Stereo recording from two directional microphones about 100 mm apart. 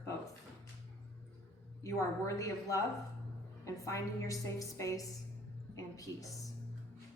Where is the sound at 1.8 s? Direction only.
30° left (ahead or behind).